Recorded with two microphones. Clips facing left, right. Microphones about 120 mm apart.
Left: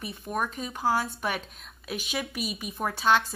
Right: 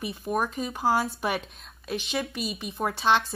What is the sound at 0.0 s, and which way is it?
A woman's voice, centre (ahead or behind).